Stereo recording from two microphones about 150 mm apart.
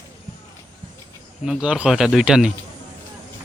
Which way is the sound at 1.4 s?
5° right (ahead or behind).